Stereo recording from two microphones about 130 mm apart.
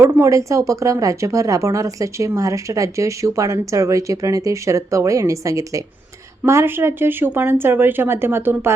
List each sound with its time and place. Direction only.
0.0 s speech: 20° right (ahead or behind)